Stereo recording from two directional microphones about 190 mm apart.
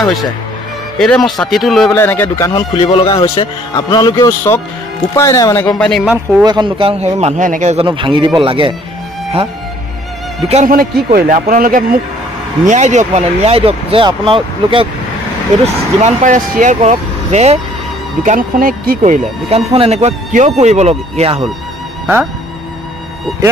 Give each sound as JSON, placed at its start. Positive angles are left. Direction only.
{"t": 0.9, "sound": "speech", "side_deg": 5}
{"t": 1.9, "sound": "speech", "side_deg": 10}
{"t": 2.5, "sound": "speech", "side_deg": 25}
{"t": 6.4, "sound": "a man's voice", "side_deg": -25}
{"t": 10.5, "sound": "speech", "side_deg": -45}
{"t": 12.6, "sound": "speech", "side_deg": -40}
{"t": 15.6, "sound": "speech", "side_deg": -40}
{"t": 22.0, "sound": "speech", "side_deg": -5}